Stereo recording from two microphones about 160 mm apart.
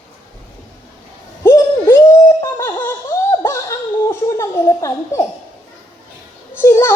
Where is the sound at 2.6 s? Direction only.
10° left (ahead or behind).